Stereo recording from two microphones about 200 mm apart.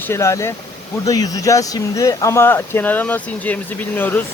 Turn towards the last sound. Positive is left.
turn(degrees=10)  # may be behind; listen again after turning